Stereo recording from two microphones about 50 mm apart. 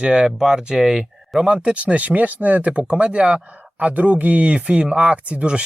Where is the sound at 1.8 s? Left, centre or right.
Right.